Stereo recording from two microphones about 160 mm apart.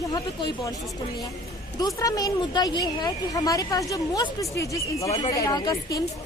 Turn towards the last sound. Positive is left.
turn(degrees=20)  # may be behind; listen again after turning